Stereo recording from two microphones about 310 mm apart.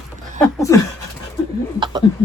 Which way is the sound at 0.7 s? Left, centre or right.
Centre.